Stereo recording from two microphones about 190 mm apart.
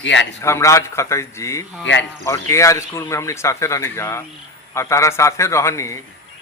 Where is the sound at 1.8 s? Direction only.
75° left (ahead or behind).